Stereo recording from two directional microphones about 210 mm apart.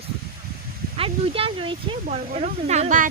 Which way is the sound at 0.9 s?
25° right (ahead or behind).